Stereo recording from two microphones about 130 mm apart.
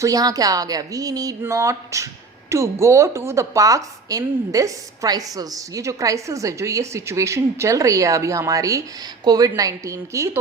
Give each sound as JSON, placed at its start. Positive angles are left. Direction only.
{"t": 0.0, "sound": "a woman's voice", "side_deg": -30}